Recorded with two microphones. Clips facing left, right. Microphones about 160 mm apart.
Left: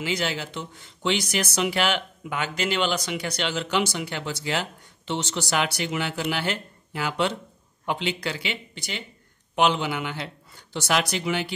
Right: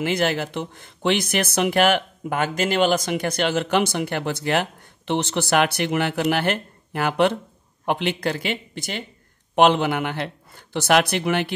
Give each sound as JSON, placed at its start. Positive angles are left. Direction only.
{"t": 0.0, "sound": "a man's voice", "side_deg": -55}